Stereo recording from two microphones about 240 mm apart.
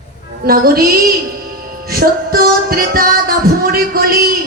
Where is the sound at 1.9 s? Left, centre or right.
Right.